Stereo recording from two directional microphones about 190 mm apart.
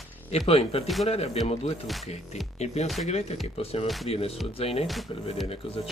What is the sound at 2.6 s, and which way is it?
Speech, 35° left (ahead or behind).